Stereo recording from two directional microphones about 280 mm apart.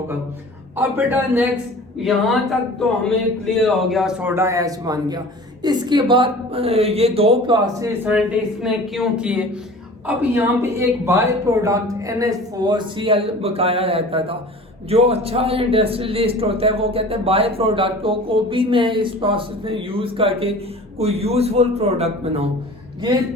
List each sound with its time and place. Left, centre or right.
0.8 s speech: centre